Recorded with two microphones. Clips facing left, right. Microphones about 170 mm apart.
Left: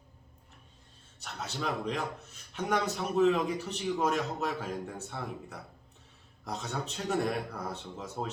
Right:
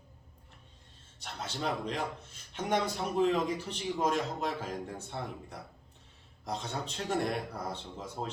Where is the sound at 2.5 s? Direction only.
30° right (ahead or behind).